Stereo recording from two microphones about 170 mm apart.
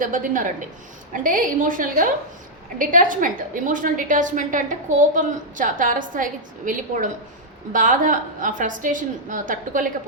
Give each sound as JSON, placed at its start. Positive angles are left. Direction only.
{"t": 0.0, "sound": "a woman's voice", "side_deg": -50}